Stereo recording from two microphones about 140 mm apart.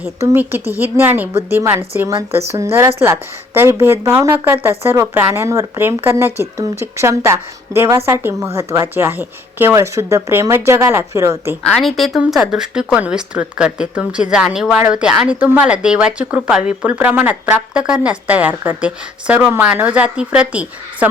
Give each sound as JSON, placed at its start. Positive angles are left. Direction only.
{"t": 0.0, "sound": "speech", "side_deg": -15}
{"t": 11.6, "sound": "speech", "side_deg": 0}